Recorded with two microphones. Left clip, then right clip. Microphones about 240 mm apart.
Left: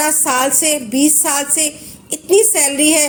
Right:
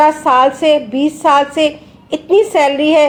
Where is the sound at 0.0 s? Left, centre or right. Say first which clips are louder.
Right 7 dB; left.